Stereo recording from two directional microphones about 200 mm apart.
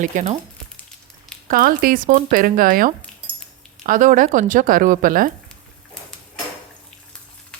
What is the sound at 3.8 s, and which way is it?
A woman's voice, 40° right (ahead or behind).